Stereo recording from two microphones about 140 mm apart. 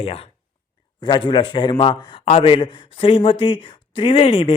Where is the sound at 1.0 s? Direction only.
35° left (ahead or behind).